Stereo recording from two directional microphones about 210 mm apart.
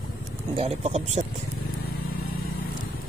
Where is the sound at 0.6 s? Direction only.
30° right (ahead or behind).